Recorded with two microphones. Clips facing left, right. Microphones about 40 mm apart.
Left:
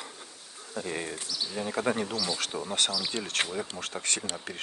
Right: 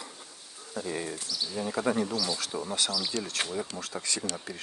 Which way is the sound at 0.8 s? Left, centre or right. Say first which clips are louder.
Even; left.